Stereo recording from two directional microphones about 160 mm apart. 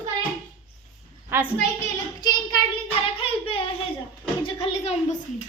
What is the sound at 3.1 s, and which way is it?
Child singing, 35° left (ahead or behind).